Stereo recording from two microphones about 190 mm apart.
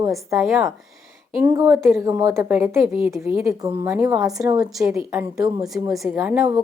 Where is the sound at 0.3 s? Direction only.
Centre (ahead or behind).